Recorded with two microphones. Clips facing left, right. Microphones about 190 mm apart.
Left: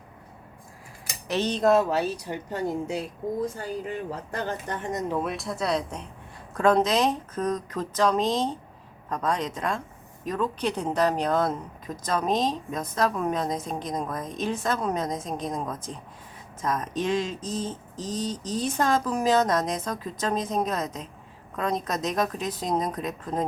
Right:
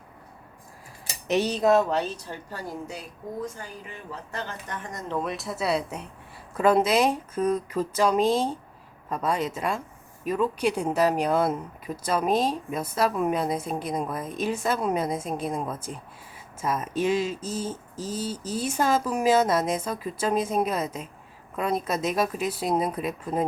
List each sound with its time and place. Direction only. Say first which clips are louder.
1.3 s a woman's voice: right 1 dB; 10° right (ahead or behind); by 4.8 s 35° left (ahead or behind)
5.0 s a woman's voice: right 3 dB; 5° left (ahead or behind)